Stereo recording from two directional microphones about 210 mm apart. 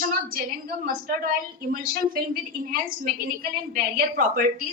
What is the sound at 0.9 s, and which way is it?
A woman's voice, 40° right (ahead or behind).